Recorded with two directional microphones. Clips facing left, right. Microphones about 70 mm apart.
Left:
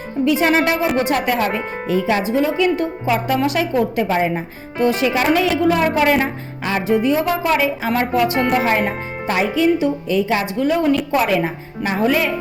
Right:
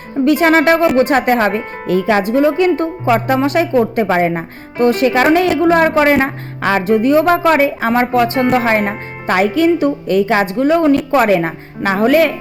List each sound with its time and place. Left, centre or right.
0.5 s a woman's voice: right
1.9 s a woman's voice: right
2.4 s speech: right
6.6 s music: right
6.9 s speech: right
7.9 s a woman's voice: right